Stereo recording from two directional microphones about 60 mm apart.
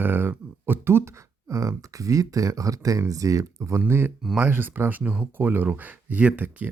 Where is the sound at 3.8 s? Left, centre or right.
Right.